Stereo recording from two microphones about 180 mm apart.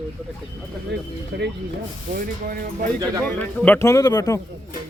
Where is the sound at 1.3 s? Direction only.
60° right (ahead or behind).